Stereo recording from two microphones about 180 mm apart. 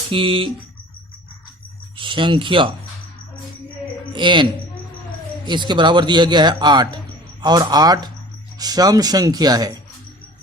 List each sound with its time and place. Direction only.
0.1 s a man's voice: 30° right (ahead or behind)
2.0 s a man's voice: 25° right (ahead or behind)
4.1 s a man's voice: 25° right (ahead or behind)
5.5 s a man's voice: 25° right (ahead or behind)